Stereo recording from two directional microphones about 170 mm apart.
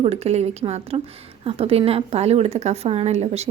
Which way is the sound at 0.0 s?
40° right (ahead or behind).